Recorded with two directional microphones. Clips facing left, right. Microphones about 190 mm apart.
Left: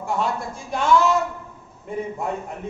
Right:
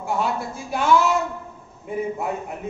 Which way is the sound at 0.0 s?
5° right (ahead or behind).